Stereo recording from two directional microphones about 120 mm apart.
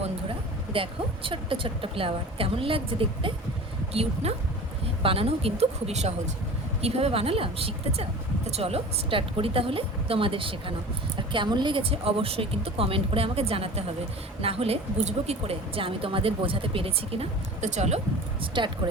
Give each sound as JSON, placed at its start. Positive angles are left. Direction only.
{"t": 0.3, "sound": "speech", "side_deg": -50}
{"t": 6.8, "sound": "speech", "side_deg": -55}
{"t": 18.5, "sound": "speech", "side_deg": -40}